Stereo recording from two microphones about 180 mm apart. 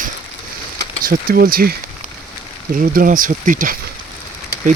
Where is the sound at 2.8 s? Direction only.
50° right (ahead or behind).